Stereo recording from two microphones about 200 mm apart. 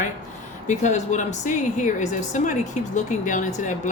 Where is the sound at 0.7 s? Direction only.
35° left (ahead or behind).